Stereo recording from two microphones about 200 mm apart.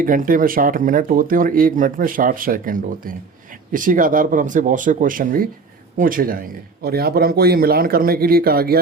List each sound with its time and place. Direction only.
0.0 s speech: 45° right (ahead or behind)